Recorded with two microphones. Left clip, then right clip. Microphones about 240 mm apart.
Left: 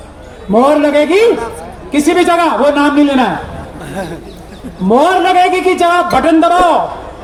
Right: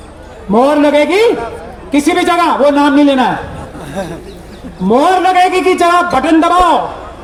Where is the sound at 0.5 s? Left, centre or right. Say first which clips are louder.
Even; right.